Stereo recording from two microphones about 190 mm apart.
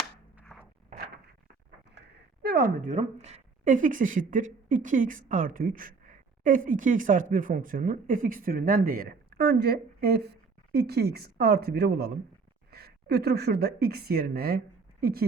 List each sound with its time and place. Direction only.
0.4 s crunch: 5° left (ahead or behind)
2.4 s a woman's voice: 55° right (ahead or behind)